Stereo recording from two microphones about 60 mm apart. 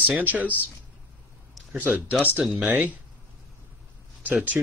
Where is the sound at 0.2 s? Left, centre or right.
Right.